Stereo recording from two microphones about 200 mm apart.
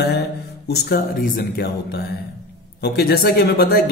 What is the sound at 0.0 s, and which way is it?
Speech, 55° left (ahead or behind).